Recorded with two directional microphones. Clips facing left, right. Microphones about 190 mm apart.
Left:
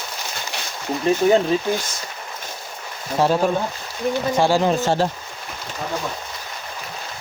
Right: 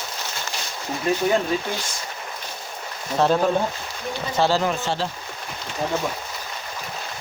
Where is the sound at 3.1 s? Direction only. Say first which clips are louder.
Left 1 dB; 10° left (ahead or behind).